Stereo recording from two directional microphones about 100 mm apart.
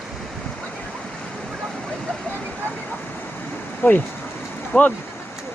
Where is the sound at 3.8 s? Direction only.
15° left (ahead or behind).